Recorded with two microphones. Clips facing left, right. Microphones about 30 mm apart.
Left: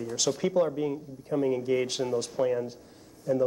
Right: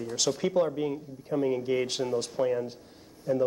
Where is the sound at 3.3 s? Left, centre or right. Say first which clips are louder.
Left 1 dB; centre.